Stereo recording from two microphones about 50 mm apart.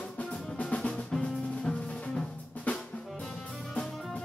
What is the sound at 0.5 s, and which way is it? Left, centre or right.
Drum, left.